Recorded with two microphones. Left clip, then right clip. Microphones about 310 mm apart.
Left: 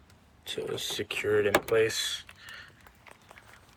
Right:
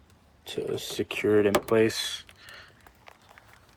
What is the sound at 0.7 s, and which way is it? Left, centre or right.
Speech, centre.